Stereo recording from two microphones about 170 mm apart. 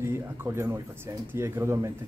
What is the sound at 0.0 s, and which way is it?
Speech, 15° right (ahead or behind).